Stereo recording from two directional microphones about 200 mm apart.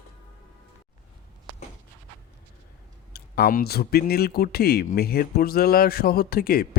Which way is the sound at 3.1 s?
50° left (ahead or behind).